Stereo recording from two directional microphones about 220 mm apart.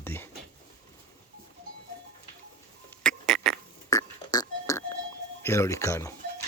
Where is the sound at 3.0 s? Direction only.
Centre (ahead or behind).